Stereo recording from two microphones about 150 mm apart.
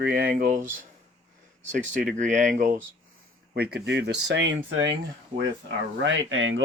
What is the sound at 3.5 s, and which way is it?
Speech, 90° right.